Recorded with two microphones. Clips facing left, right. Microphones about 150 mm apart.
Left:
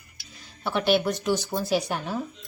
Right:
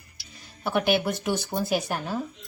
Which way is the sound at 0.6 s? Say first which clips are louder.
Left 1 dB; 10° right (ahead or behind).